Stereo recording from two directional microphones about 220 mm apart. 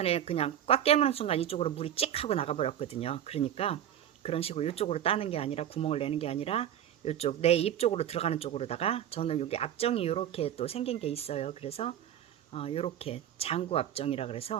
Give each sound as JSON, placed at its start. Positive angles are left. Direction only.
{"t": 0.0, "sound": "speech", "side_deg": 25}